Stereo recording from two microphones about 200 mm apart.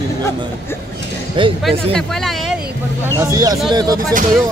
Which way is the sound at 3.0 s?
15° right (ahead or behind).